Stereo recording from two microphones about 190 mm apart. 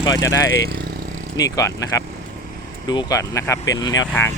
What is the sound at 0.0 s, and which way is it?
Speech, 20° left (ahead or behind).